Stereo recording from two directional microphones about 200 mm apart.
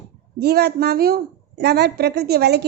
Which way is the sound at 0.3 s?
50° right (ahead or behind).